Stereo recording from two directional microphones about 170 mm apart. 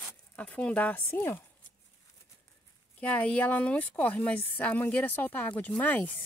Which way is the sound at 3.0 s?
10° left (ahead or behind).